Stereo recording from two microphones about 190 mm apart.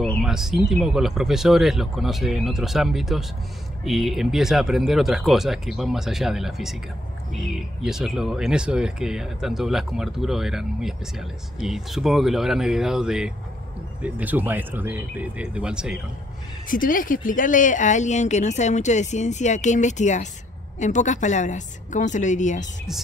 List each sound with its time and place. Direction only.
0.0 s speech: centre (ahead or behind)
16.6 s speech: 45° left (ahead or behind)